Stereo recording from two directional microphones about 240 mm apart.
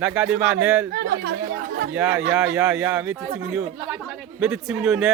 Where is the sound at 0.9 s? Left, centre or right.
Right.